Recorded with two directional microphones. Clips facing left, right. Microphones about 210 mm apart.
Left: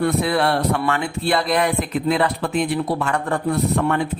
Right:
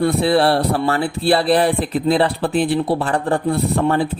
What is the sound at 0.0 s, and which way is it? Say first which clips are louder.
Speech: right 4 dB; 30° right (ahead or behind).